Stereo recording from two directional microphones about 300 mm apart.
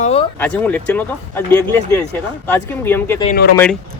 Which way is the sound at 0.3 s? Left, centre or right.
Centre.